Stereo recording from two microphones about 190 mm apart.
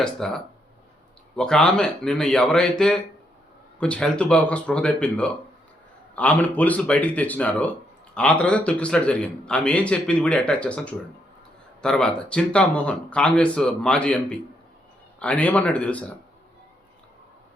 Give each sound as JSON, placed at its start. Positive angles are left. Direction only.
{"t": 0.0, "sound": "a man's voice", "side_deg": 5}